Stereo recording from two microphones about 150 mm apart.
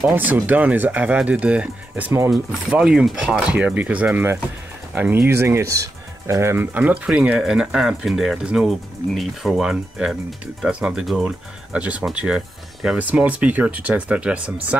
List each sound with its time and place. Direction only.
0.1 s speech: 10° right (ahead or behind)